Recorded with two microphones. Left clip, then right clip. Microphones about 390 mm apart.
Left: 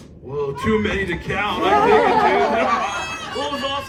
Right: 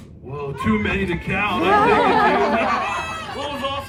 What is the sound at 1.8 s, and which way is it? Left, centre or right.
Speech, right.